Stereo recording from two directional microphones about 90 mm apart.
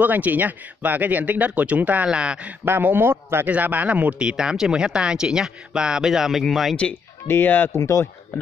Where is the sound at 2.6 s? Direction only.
25° right (ahead or behind).